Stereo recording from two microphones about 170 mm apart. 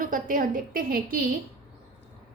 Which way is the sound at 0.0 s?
55° right (ahead or behind).